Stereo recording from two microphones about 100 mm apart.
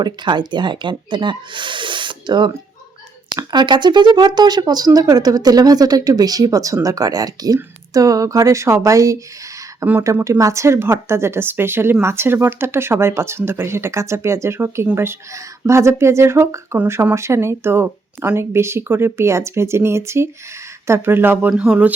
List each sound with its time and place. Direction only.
0.0 s speech: 50° right (ahead or behind); by 21.5 s 20° right (ahead or behind)
21.5 s speech: 10° right (ahead or behind)